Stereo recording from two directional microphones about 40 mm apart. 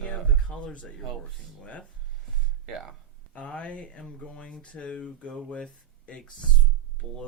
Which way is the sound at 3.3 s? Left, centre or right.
Left.